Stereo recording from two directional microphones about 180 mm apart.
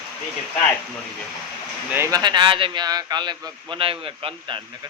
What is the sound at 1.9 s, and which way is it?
Speech, 15° right (ahead or behind).